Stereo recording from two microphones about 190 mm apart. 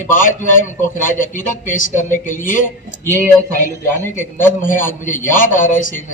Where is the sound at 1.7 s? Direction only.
45° left (ahead or behind).